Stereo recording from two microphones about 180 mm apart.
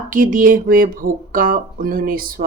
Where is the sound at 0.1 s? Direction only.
50° right (ahead or behind).